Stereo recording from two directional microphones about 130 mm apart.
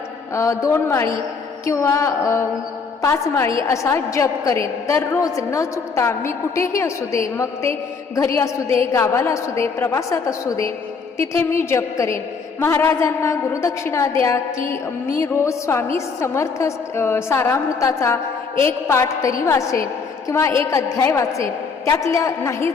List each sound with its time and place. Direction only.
0.3 s a woman's voice: 25° left (ahead or behind)